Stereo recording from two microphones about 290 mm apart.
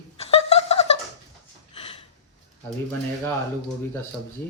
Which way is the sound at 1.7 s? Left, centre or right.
Centre.